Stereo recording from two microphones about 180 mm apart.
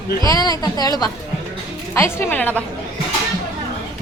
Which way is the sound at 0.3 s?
20° left (ahead or behind).